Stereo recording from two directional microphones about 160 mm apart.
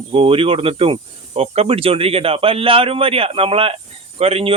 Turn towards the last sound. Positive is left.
turn(degrees=-40)  # may be behind; listen again after turning